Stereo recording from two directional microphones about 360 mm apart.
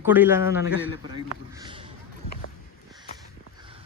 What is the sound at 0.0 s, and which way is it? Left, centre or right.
A man's voice, centre.